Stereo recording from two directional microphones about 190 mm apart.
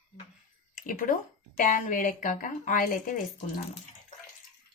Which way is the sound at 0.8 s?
45° left (ahead or behind).